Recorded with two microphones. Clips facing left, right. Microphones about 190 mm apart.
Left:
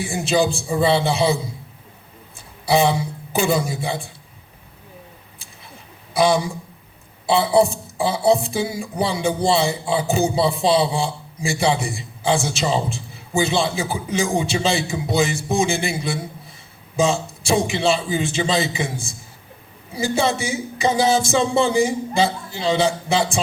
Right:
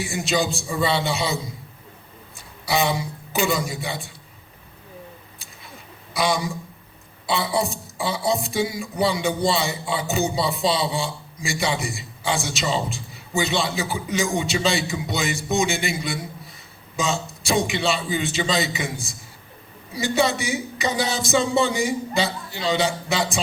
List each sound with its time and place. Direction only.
0.0 s speech: 30° left (ahead or behind)
2.6 s speech: 30° left (ahead or behind)
6.1 s a man's voice: 30° left (ahead or behind)